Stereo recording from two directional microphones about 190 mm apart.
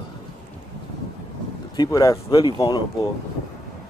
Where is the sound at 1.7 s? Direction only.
20° left (ahead or behind).